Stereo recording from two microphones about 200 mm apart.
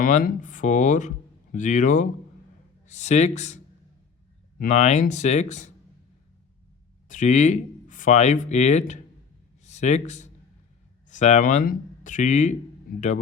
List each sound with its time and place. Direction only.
0.0 s speech: 45° left (ahead or behind)
7.1 s speech: 35° left (ahead or behind)